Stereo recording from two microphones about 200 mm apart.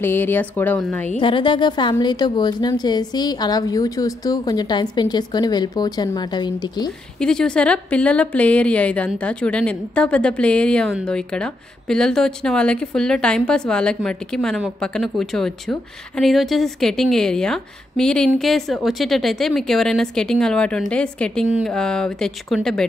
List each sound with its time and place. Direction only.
0.0 s a woman's voice: 10° left (ahead or behind)
1.2 s a woman's voice: 25° left (ahead or behind)
7.2 s speech: 5° left (ahead or behind)